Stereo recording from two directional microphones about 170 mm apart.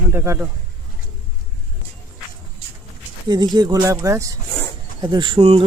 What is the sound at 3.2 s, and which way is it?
Speech, 25° right (ahead or behind).